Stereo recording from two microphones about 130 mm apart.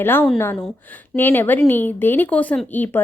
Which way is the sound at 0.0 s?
15° left (ahead or behind).